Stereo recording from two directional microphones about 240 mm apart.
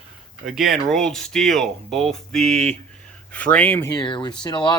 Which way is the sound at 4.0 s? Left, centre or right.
Centre.